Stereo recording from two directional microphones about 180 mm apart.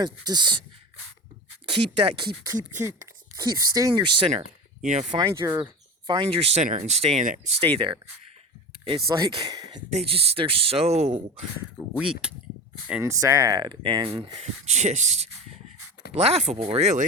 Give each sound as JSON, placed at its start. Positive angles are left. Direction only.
{"t": 0.0, "sound": "speech", "side_deg": -25}
{"t": 1.6, "sound": "speech", "side_deg": -25}
{"t": 2.7, "sound": "speech", "side_deg": -15}
{"t": 4.9, "sound": "speech", "side_deg": -40}
{"t": 5.1, "sound": "speech", "side_deg": -15}
{"t": 6.1, "sound": "speech", "side_deg": -30}
{"t": 9.9, "sound": "speech", "side_deg": -35}
{"t": 12.9, "sound": "speech", "side_deg": -15}